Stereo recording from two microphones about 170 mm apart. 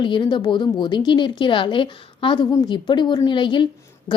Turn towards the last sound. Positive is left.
turn(degrees=25)  # may be behind; listen again after turning